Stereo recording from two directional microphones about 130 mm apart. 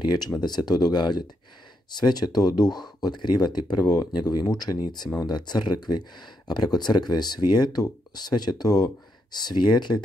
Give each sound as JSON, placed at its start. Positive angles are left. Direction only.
{"t": 0.0, "sound": "speech", "side_deg": 35}